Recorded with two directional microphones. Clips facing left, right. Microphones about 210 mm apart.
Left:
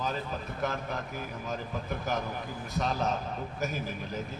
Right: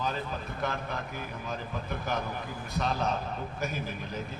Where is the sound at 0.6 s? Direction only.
40° left (ahead or behind).